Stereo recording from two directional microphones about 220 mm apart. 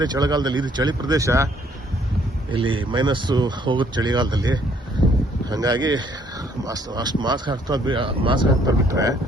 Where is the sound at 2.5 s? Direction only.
25° right (ahead or behind).